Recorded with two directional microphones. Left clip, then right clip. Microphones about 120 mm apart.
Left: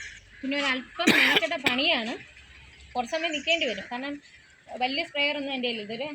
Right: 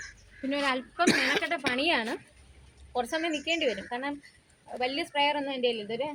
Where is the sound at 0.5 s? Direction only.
40° right (ahead or behind).